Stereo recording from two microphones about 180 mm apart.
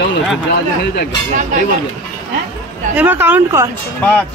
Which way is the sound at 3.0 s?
10° right (ahead or behind).